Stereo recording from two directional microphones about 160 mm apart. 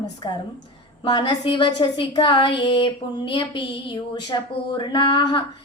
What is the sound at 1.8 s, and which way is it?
Speech, 30° left (ahead or behind).